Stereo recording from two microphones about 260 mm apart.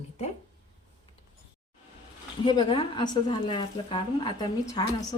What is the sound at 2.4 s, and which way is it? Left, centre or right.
A woman's voice, centre.